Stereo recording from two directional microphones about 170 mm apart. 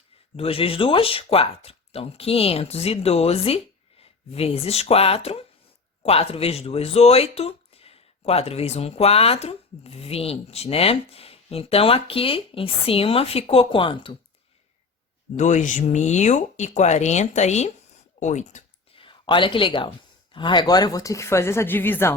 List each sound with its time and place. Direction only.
0.3 s speech: 35° left (ahead or behind)
15.4 s speech: 45° left (ahead or behind)
18.9 s speech: 30° left (ahead or behind); by 22.1 s 10° left (ahead or behind)